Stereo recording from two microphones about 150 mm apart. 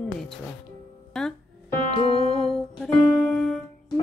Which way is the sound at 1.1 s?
Centre (ahead or behind).